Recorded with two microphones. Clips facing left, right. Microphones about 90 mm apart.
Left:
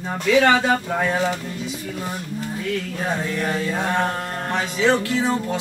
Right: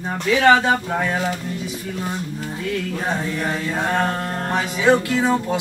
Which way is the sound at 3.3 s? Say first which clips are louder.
Even; 15° right (ahead or behind).